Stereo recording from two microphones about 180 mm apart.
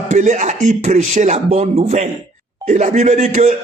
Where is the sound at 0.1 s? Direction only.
40° right (ahead or behind).